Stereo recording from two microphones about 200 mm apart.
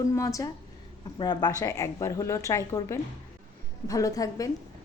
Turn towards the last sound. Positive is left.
turn(degrees=15)  # may be behind; listen again after turning